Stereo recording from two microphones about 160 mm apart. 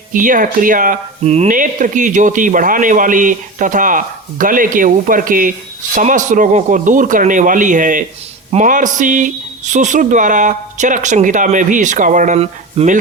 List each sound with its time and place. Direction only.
0.1 s speech: 55° right (ahead or behind)
1.2 s speech: 40° right (ahead or behind)
1.5 s speech: 55° right (ahead or behind)